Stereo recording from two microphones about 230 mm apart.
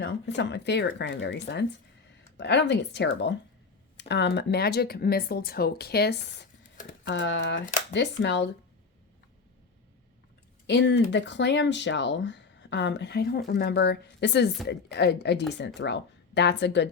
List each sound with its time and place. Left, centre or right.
0.0 s speech: left
7.0 s speech: left
7.6 s speech: left
7.9 s speech: left
10.7 s speech: left